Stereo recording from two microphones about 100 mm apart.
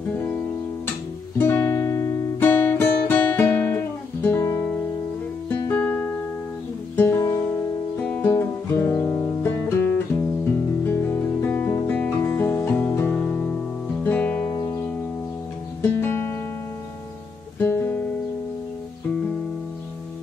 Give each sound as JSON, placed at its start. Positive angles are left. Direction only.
{"t": 1.4, "sound": "music", "side_deg": 25}
{"t": 5.7, "sound": "music", "side_deg": 10}
{"t": 7.1, "sound": "guitar", "side_deg": 35}
{"t": 8.0, "sound": "music", "side_deg": 10}
{"t": 8.3, "sound": "guitar", "side_deg": 25}
{"t": 10.9, "sound": "music", "side_deg": 20}
{"t": 14.5, "sound": "music", "side_deg": 30}
{"t": 16.0, "sound": "music", "side_deg": 25}
{"t": 17.6, "sound": "music", "side_deg": 25}